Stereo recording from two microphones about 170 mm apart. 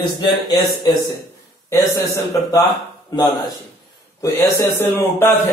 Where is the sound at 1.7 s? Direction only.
20° left (ahead or behind).